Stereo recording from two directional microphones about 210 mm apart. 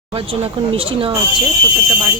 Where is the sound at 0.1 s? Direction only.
25° right (ahead or behind).